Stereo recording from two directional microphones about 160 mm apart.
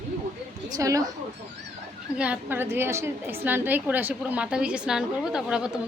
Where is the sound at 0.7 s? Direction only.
20° right (ahead or behind).